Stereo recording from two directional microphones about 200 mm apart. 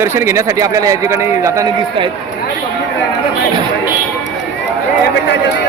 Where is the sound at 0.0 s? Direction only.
10° right (ahead or behind).